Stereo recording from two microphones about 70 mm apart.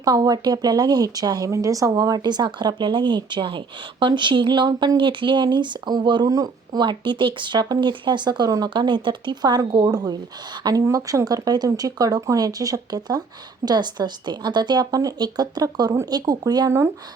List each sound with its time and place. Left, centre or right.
0.0 s speech: right
1.5 s speech: right
7.5 s speech: right
10.8 s speech: right
13.7 s speech: right